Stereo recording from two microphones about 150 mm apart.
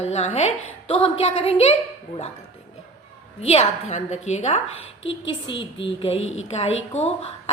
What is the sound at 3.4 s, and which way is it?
A woman's voice, 45° left (ahead or behind).